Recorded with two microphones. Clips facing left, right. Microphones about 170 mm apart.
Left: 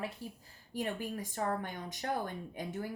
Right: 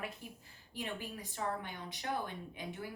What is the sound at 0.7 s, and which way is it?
Speech, 45° left (ahead or behind).